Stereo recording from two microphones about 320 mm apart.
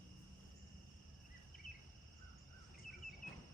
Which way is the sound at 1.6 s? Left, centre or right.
Centre.